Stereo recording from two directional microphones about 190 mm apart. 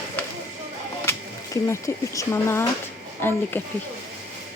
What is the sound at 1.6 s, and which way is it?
Speech, 15° left (ahead or behind).